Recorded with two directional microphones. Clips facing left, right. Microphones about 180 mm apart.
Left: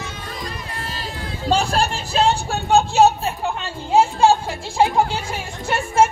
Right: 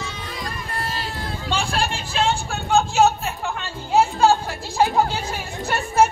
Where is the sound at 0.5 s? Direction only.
50° right (ahead or behind).